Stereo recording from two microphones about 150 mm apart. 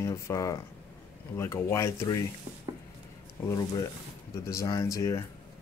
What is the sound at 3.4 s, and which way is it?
Speech, 25° left (ahead or behind).